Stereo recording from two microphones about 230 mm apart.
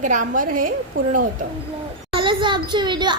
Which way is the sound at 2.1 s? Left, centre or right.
Right.